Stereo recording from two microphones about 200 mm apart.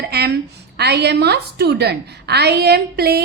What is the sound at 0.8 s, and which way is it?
A woman's voice, 55° right (ahead or behind).